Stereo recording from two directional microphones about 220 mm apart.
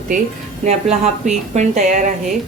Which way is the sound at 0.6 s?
30° right (ahead or behind).